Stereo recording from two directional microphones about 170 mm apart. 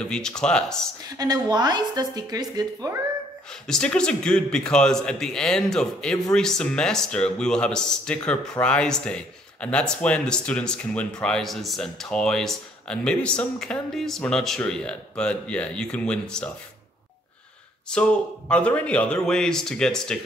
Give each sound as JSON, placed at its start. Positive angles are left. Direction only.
{"t": 0.0, "sound": "a man's voice", "side_deg": 5}
{"t": 1.1, "sound": "a woman's voice", "side_deg": -20}
{"t": 3.6, "sound": "a man's voice", "side_deg": 5}
{"t": 17.8, "sound": "a man's voice", "side_deg": 5}